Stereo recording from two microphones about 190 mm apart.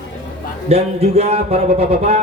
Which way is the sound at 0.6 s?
35° right (ahead or behind).